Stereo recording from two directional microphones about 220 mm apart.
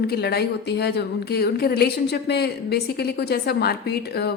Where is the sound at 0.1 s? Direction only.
45° left (ahead or behind).